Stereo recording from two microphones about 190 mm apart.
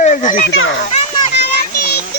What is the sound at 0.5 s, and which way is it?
Speech, 90° left.